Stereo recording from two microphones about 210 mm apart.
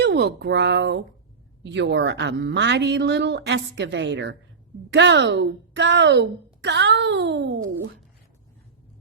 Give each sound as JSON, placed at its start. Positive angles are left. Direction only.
{"t": 0.0, "sound": "speech", "side_deg": -55}